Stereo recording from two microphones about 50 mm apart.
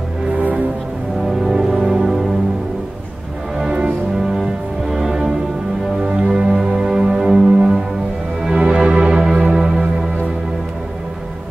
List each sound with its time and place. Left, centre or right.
1.2 s music: centre
4.3 s music: centre